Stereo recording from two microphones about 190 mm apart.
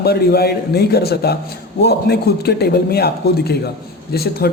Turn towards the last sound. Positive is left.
turn(degrees=55)  # may be behind; listen again after turning